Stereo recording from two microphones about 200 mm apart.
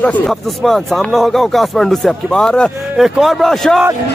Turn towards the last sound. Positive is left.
turn(degrees=0)  # may be behind; listen again after turning